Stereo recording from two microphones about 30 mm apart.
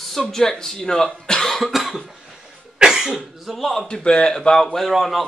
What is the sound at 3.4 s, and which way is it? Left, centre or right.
Speech, centre.